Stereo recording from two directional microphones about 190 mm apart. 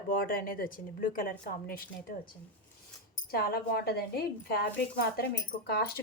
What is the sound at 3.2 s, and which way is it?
A woman's voice, 55° left (ahead or behind).